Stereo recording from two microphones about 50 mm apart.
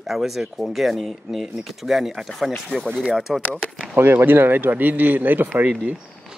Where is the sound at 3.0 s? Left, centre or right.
Centre.